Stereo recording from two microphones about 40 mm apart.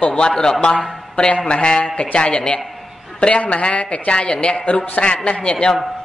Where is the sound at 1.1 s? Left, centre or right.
Left.